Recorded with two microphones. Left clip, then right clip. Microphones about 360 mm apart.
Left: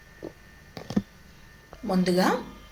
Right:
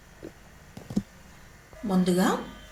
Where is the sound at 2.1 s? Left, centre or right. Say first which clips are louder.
Left 2 dB; centre.